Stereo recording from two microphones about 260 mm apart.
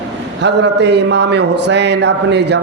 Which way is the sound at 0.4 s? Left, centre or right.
Right.